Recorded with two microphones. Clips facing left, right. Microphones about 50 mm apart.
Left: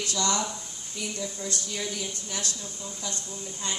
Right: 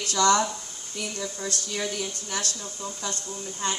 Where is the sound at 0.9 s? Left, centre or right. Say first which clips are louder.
Right 1 dB; right.